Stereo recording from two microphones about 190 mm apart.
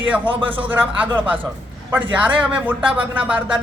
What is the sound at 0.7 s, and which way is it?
Speech, 10° right (ahead or behind).